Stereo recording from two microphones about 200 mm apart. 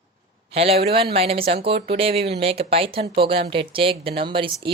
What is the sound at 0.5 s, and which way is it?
Speech, 30° right (ahead or behind).